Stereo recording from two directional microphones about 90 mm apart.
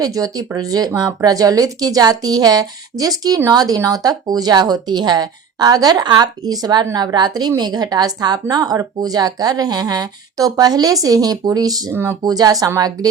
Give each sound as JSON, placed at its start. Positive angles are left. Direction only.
{"t": 0.0, "sound": "a woman's voice", "side_deg": -45}
{"t": 11.9, "sound": "speech", "side_deg": -30}
{"t": 12.2, "sound": "a woman's voice", "side_deg": -45}